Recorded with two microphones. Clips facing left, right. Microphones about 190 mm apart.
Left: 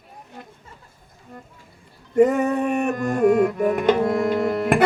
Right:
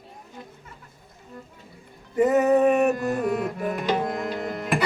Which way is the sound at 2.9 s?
50° left (ahead or behind).